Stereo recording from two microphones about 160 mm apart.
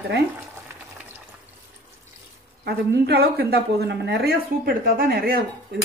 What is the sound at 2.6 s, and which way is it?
Speech, 90° right.